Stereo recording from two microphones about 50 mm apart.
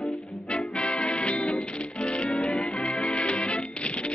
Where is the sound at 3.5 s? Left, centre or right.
Left.